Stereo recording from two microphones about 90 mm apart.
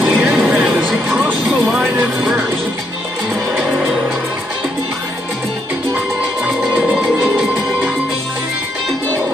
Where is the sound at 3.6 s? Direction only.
10° right (ahead or behind).